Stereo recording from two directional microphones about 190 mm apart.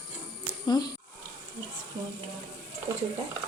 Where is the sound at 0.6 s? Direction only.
20° left (ahead or behind).